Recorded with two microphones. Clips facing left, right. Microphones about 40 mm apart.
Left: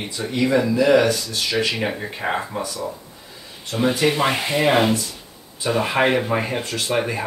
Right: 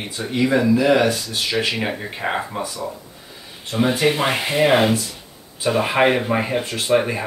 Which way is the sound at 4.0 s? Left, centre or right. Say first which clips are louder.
Even; centre.